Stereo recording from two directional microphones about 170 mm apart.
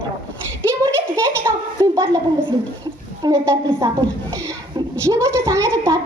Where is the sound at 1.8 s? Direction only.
20° right (ahead or behind).